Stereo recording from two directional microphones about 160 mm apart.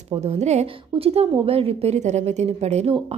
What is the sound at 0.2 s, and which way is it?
A woman's voice, 45° right (ahead or behind).